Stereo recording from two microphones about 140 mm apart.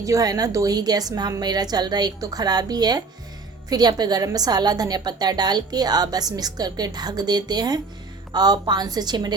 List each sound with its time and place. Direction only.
0.0 s a woman's voice: 25° right (ahead or behind)